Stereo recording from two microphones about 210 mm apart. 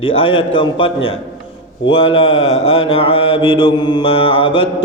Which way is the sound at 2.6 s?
25° left (ahead or behind).